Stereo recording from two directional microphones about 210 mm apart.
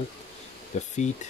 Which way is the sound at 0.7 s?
35° left (ahead or behind).